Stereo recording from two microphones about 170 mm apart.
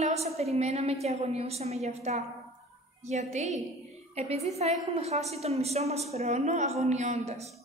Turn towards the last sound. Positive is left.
turn(degrees=-40)  # may be behind; listen again after turning